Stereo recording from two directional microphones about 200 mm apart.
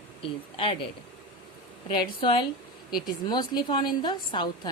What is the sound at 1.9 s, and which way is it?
Speech, 25° left (ahead or behind).